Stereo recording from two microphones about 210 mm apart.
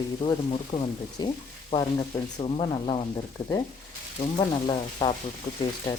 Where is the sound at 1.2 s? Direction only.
20° left (ahead or behind).